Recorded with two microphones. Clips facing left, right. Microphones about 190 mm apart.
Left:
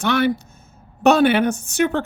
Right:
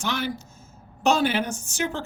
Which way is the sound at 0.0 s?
60° left (ahead or behind).